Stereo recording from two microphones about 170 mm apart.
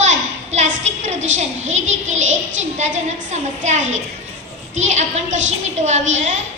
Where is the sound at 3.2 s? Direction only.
45° right (ahead or behind).